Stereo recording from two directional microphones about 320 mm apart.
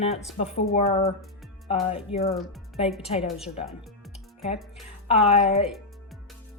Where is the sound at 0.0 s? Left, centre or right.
Centre.